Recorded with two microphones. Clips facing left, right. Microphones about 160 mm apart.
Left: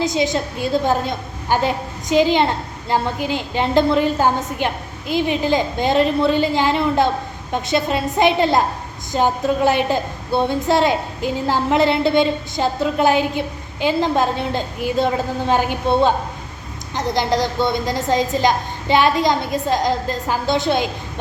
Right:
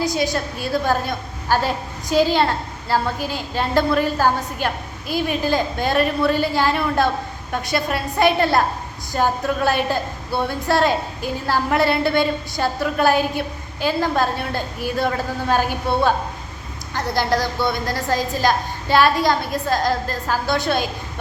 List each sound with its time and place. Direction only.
0.0 s a woman's voice: 20° left (ahead or behind)